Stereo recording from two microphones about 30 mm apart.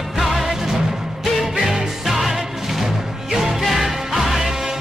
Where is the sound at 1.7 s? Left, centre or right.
Centre.